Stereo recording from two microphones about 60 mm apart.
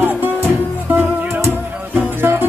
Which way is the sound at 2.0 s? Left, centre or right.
Right.